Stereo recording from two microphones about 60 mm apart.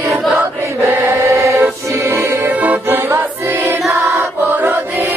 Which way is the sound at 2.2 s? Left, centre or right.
Right.